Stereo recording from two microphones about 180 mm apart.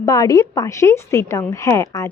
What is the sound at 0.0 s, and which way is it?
A woman's voice, 20° left (ahead or behind).